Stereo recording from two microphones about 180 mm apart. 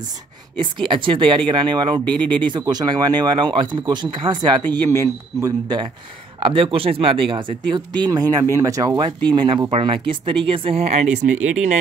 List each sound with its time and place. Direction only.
0.6 s speech: 25° right (ahead or behind)